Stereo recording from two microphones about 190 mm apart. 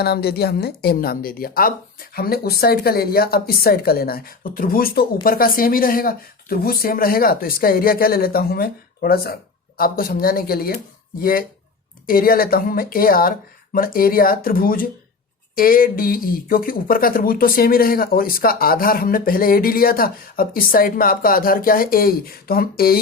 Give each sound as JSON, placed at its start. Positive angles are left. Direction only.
{"t": 0.0, "sound": "speech", "side_deg": 55}